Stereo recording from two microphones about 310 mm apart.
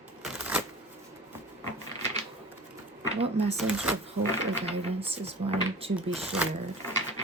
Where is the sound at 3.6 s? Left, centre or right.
Centre.